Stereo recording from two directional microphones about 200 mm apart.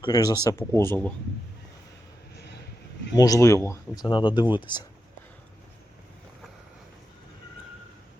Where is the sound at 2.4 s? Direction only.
55° left (ahead or behind).